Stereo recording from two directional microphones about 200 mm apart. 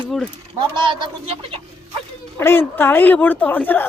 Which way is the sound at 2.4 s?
10° left (ahead or behind).